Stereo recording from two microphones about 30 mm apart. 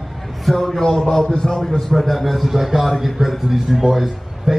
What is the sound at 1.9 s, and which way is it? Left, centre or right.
Speech, centre.